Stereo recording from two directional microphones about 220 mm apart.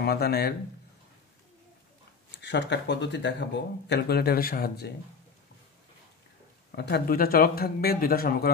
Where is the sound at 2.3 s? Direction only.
55° left (ahead or behind).